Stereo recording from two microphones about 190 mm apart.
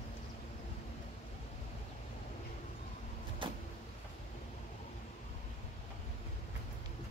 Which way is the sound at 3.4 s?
25° right (ahead or behind).